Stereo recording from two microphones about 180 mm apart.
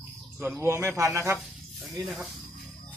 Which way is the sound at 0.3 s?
10° right (ahead or behind).